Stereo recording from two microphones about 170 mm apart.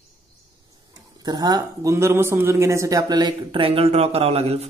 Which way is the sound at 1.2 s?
25° right (ahead or behind).